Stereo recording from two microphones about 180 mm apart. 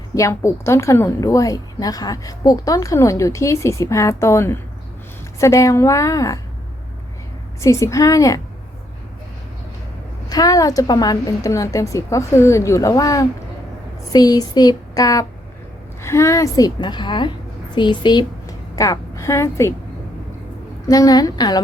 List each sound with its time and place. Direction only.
0.1 s a woman's voice: 15° left (ahead or behind)
7.6 s a woman's voice: 15° left (ahead or behind)
10.2 s a woman's voice: 20° left (ahead or behind)
20.8 s a woman's voice: 20° left (ahead or behind)